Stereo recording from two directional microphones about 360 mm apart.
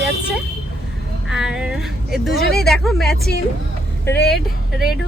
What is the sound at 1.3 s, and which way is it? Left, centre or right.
Speech, centre.